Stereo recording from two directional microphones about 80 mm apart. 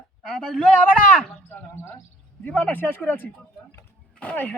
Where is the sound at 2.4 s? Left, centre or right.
Left.